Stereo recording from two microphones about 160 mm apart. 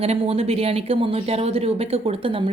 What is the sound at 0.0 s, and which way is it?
A woman's voice, 40° right (ahead or behind).